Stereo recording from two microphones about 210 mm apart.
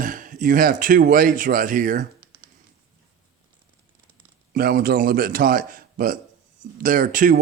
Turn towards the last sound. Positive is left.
turn(degrees=-40)  # may be behind; listen again after turning